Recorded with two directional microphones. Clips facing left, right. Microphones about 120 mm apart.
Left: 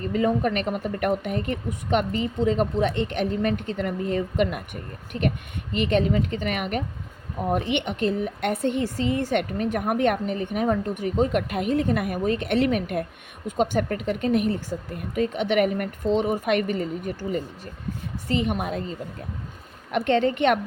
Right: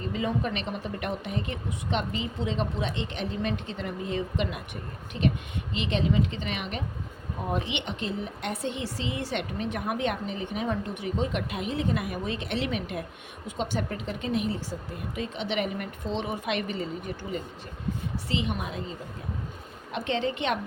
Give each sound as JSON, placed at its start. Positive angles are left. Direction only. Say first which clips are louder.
{"t": 0.1, "sound": "a woman's voice", "louder": "left 7 dB", "side_deg": 50}
{"t": 19.9, "sound": "a woman's voice", "louder": "left 7 dB", "side_deg": 60}